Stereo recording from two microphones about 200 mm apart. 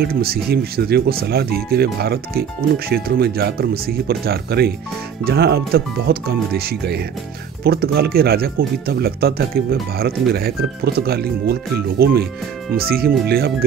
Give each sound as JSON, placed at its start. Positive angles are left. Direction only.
{"t": 0.0, "sound": "speech", "side_deg": -50}